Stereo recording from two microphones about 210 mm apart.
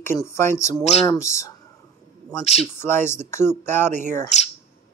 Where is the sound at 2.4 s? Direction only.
30° left (ahead or behind).